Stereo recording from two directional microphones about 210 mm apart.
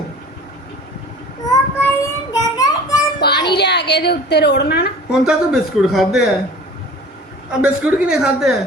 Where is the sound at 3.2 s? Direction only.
50° left (ahead or behind).